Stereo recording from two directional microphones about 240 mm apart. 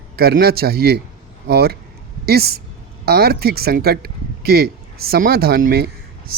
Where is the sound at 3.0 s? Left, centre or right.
Right.